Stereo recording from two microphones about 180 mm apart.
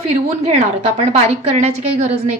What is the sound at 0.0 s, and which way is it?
Speech, 35° right (ahead or behind).